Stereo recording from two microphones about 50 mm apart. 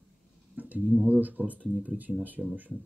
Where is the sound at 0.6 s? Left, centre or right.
Right.